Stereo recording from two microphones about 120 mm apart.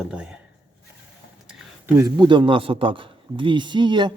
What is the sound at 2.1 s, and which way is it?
A man's voice, 40° right (ahead or behind).